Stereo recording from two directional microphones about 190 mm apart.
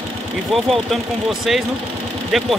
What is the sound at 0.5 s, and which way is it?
Speech, centre (ahead or behind).